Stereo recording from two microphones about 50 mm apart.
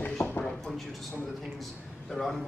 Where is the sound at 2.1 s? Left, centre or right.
Centre.